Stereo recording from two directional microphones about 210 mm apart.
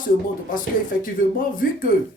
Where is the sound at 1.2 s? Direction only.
40° left (ahead or behind).